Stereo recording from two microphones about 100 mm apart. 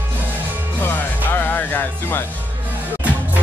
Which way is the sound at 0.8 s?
20° left (ahead or behind).